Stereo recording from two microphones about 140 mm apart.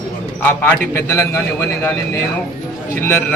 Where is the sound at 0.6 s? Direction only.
15° left (ahead or behind).